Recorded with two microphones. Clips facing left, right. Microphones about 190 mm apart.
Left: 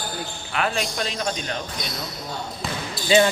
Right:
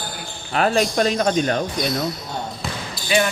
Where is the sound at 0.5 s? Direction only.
40° right (ahead or behind).